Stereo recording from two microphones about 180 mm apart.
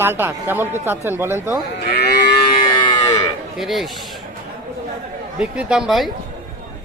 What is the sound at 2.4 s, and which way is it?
Moo, 25° left (ahead or behind).